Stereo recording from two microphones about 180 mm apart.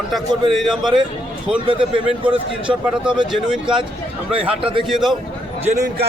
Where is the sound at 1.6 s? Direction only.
30° right (ahead or behind).